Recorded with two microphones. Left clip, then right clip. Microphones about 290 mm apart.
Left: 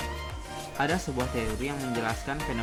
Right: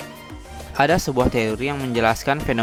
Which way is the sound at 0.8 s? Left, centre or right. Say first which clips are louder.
Right 11 dB; right.